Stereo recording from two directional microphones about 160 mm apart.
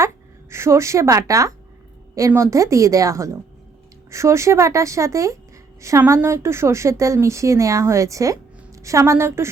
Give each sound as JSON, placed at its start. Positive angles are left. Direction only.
{"t": 0.5, "sound": "a woman's voice", "side_deg": -15}